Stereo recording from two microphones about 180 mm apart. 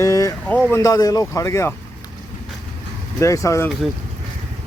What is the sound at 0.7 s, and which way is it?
Speech, 15° left (ahead or behind).